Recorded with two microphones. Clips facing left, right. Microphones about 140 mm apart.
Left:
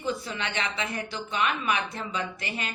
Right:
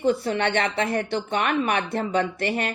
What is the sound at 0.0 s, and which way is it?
Speech, 65° right (ahead or behind).